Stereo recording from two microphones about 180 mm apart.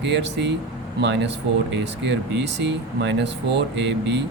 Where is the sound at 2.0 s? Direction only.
75° right (ahead or behind).